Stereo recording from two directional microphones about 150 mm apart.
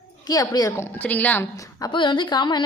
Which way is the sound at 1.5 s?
20° left (ahead or behind).